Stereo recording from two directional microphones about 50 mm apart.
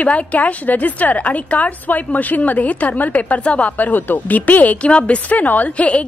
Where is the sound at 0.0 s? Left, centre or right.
Left.